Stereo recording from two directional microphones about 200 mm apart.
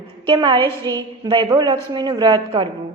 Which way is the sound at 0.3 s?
25° right (ahead or behind).